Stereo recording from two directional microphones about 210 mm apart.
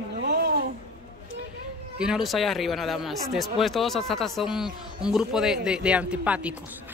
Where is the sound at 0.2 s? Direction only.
50° right (ahead or behind).